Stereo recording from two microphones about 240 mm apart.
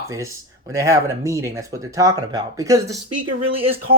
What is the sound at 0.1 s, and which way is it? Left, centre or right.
Speech, centre.